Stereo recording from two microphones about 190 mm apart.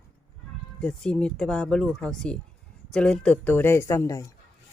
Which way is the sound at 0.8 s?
5° left (ahead or behind).